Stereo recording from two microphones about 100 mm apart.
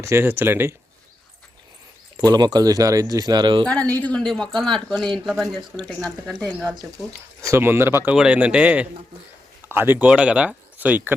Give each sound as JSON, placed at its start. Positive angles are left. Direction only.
{"t": 0.0, "sound": "speech", "side_deg": -25}
{"t": 2.1, "sound": "speech", "side_deg": -40}
{"t": 3.7, "sound": "speech", "side_deg": 15}
{"t": 5.7, "sound": "speech", "side_deg": -20}
{"t": 6.1, "sound": "speech", "side_deg": 5}
{"t": 7.4, "sound": "speech", "side_deg": -25}
{"t": 8.1, "sound": "speech", "side_deg": -10}